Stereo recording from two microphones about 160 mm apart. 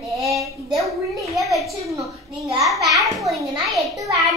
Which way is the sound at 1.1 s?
20° right (ahead or behind).